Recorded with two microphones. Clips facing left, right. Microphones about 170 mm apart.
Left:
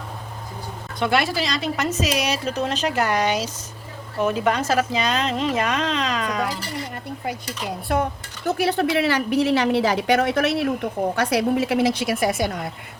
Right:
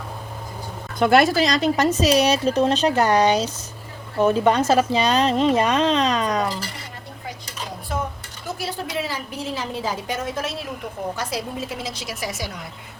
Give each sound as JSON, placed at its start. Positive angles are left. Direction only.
{"t": 0.9, "sound": "a woman's voice", "side_deg": -45}
{"t": 7.9, "sound": "a woman's voice", "side_deg": 65}